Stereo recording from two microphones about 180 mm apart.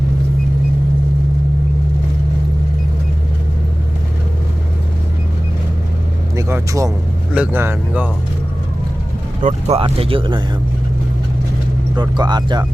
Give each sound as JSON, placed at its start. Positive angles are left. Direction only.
{"t": 6.3, "sound": "vehicle", "side_deg": -15}
{"t": 7.3, "sound": "speech", "side_deg": -10}
{"t": 9.4, "sound": "speech", "side_deg": -40}
{"t": 11.9, "sound": "speech", "side_deg": -25}